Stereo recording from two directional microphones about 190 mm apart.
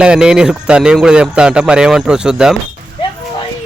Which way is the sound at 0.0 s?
5° right (ahead or behind).